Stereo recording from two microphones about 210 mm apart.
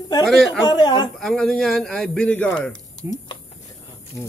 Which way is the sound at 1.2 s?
5° left (ahead or behind).